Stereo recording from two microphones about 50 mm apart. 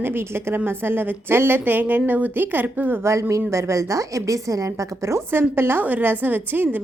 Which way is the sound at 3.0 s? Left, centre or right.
Right.